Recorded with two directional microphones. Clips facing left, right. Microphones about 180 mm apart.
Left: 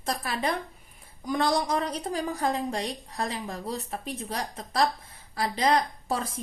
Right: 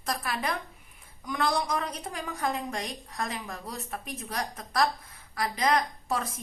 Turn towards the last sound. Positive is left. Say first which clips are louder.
# left 1 dB
turn(degrees=30)  # may be behind; listen again after turning